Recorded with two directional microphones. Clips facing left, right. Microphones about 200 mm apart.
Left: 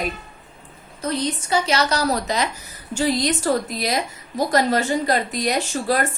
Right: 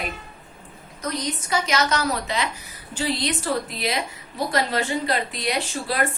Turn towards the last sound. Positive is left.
turn(degrees=45)  # may be behind; listen again after turning